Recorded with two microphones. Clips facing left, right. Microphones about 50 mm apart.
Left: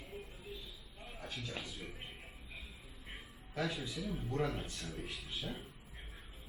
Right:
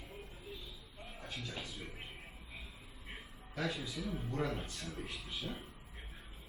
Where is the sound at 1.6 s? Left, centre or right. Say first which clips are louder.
Even; centre.